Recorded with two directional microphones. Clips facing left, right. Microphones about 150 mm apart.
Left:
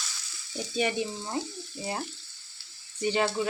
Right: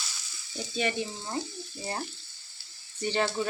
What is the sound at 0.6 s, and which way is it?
Frying, 15° left (ahead or behind).